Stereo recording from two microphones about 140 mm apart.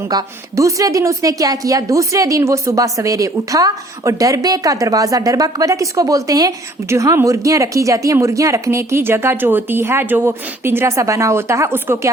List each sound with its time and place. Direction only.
0.1 s speech: 25° right (ahead or behind)